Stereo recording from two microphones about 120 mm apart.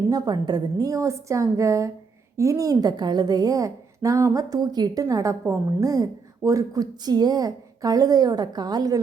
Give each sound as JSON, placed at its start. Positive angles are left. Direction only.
{"t": 0.1, "sound": "a woman's voice", "side_deg": -35}